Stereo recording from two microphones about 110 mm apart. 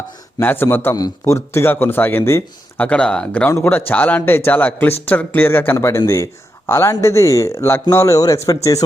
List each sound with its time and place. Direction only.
0.3 s speech: 20° left (ahead or behind)
0.9 s speech: 30° left (ahead or behind)